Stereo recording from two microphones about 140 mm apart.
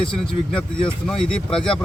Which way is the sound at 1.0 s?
5° left (ahead or behind).